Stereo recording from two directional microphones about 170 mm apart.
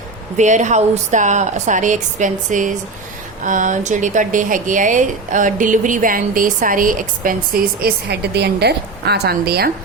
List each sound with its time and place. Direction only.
0.3 s a woman's voice: 45° right (ahead or behind); by 9.7 s 65° right (ahead or behind)